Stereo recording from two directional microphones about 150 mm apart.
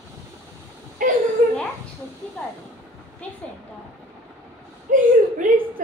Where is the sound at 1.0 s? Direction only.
65° right (ahead or behind).